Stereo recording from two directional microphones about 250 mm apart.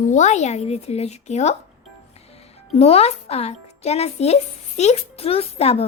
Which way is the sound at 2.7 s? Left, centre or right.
Left.